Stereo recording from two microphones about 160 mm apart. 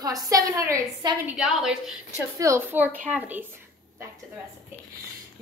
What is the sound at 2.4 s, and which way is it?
A woman's voice, 15° right (ahead or behind).